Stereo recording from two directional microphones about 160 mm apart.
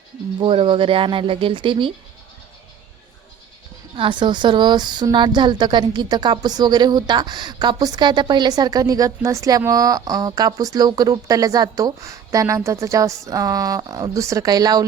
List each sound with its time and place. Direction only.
0.3 s speech: 35° right (ahead or behind)
3.9 s a woman's voice: 30° right (ahead or behind)